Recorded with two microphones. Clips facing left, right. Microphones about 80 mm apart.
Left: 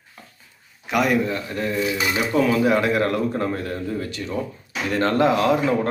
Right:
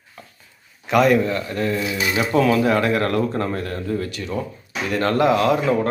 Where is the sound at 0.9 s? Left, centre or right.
Centre.